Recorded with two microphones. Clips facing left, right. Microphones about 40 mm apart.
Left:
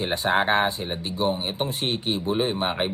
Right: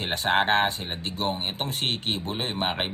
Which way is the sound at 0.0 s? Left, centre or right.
Right.